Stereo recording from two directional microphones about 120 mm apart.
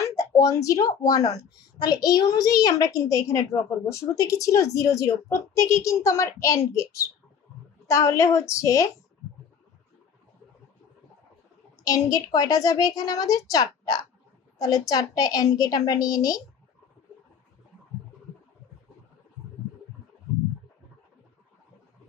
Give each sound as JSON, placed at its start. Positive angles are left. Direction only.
{"t": 0.0, "sound": "a woman's voice", "side_deg": 30}
{"t": 11.8, "sound": "a woman's voice", "side_deg": 30}